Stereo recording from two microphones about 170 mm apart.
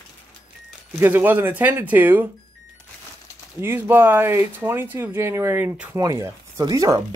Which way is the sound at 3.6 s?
15° right (ahead or behind).